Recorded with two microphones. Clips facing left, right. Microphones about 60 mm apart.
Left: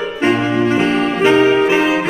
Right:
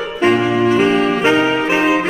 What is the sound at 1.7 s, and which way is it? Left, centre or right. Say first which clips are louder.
Music: even; centre.